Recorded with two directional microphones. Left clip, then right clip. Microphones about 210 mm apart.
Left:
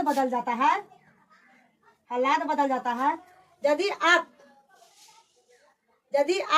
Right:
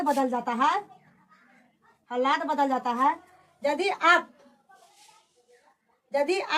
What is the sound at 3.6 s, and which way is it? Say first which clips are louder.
Speech: left 1 dB; 5° left (ahead or behind).